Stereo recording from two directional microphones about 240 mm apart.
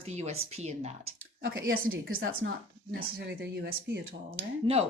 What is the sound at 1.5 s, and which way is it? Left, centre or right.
Speech, right.